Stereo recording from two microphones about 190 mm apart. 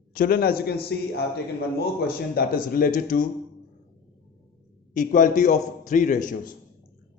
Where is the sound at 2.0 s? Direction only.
50° left (ahead or behind).